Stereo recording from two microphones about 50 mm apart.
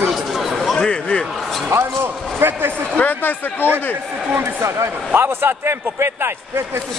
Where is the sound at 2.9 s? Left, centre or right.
Left.